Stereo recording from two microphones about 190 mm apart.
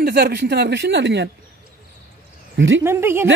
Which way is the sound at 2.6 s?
75° right (ahead or behind).